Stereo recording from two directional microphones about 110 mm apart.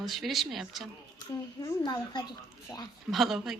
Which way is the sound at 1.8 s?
40° left (ahead or behind).